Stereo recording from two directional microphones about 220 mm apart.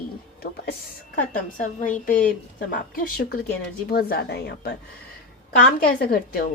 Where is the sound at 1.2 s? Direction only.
35° left (ahead or behind).